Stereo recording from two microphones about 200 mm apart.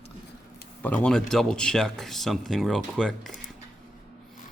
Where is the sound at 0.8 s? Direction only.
5° left (ahead or behind).